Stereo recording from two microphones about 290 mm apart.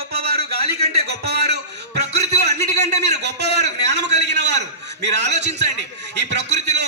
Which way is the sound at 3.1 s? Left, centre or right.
Right.